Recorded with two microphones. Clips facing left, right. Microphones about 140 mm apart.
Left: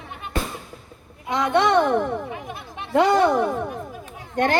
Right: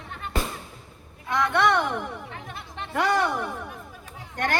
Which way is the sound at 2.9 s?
20° left (ahead or behind).